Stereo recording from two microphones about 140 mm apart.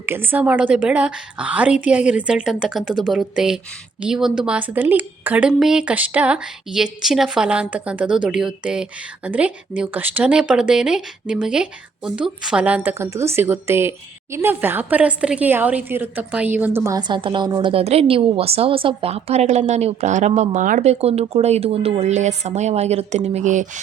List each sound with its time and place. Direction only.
0.0 s a woman's voice: 15° right (ahead or behind)
17.0 s a woman's voice: 35° right (ahead or behind); by 23.8 s 60° right (ahead or behind)